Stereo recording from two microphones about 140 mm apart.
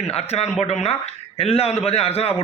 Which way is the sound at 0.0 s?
45° left (ahead or behind).